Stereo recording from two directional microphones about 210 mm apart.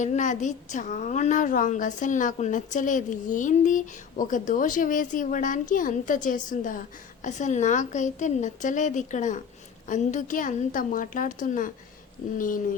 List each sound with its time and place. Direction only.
0.0 s a woman's voice: 35° left (ahead or behind)